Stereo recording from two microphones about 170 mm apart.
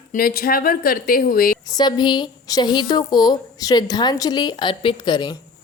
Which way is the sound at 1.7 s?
25° left (ahead or behind).